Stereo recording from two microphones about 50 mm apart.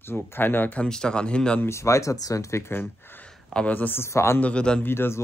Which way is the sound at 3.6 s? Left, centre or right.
Left.